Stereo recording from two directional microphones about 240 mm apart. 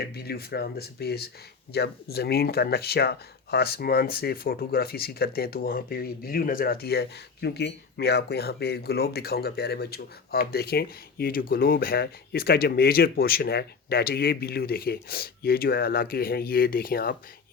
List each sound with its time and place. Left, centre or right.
0.0 s speech: left